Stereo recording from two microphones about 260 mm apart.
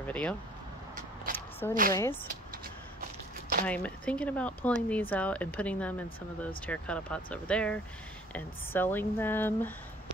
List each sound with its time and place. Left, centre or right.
0.0 s speech: centre
1.3 s a sound: centre
3.0 s walk: right
3.6 s speech: centre